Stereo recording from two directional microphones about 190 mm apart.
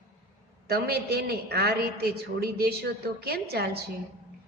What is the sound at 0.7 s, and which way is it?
A woman's voice, 55° right (ahead or behind).